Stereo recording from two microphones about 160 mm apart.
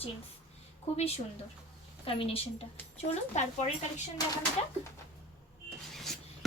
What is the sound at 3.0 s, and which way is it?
A woman's voice, 45° left (ahead or behind).